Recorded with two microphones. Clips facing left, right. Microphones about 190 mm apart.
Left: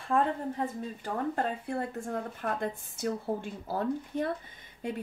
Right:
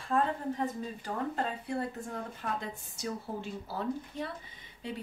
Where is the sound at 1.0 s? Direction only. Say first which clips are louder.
Left 3 dB; 50° left (ahead or behind).